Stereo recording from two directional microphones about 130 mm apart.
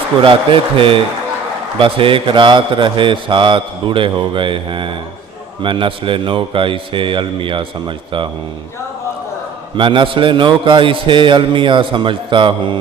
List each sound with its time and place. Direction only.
0.2 s a man's voice: 40° right (ahead or behind)
9.7 s a man's voice: 40° right (ahead or behind)